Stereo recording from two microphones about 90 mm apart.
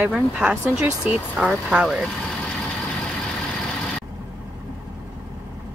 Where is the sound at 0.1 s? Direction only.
10° right (ahead or behind).